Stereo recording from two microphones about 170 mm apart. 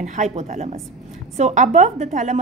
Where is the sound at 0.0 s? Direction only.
45° right (ahead or behind).